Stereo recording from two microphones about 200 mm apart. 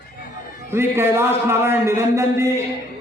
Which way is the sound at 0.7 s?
10° right (ahead or behind).